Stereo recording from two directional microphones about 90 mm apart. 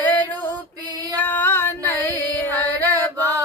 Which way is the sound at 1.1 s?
20° left (ahead or behind).